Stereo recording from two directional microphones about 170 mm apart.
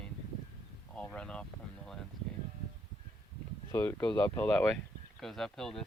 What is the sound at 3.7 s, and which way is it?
Speech, 15° left (ahead or behind).